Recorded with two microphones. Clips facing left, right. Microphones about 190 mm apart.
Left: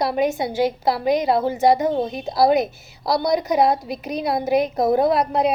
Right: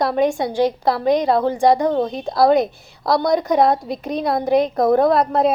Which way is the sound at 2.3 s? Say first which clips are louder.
Right 2 dB; 50° right (ahead or behind).